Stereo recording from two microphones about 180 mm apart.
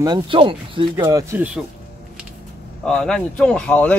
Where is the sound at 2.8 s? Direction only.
5° left (ahead or behind).